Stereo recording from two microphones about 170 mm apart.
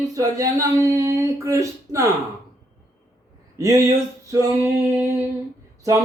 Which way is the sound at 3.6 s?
20° right (ahead or behind).